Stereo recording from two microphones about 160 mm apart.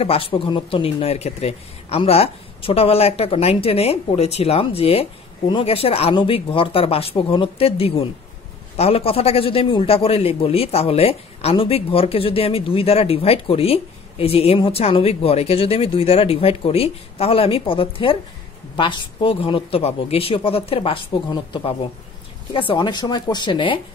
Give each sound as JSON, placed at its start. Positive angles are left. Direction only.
{"t": 0.0, "sound": "a man's voice", "side_deg": 35}